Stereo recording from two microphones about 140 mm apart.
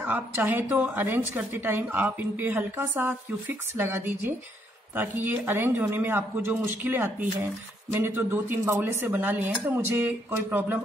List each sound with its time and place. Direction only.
0.0 s a woman's voice: 15° right (ahead or behind)